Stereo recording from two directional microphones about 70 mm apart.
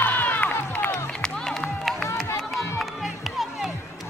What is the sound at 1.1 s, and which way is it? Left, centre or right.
Music, centre.